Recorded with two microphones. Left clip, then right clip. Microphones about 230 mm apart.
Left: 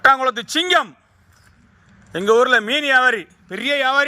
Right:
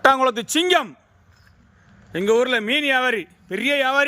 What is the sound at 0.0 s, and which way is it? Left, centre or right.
Speech, centre.